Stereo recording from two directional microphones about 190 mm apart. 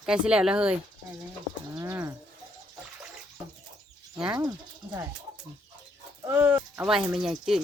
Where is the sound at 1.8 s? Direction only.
15° right (ahead or behind).